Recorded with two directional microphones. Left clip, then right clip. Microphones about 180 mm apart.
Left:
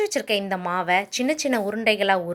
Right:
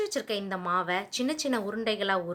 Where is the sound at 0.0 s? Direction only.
30° left (ahead or behind).